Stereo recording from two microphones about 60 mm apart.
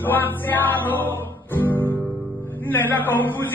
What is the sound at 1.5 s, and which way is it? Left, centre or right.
Guitar, left.